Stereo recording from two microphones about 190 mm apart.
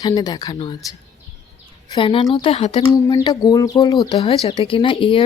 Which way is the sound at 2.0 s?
30° left (ahead or behind).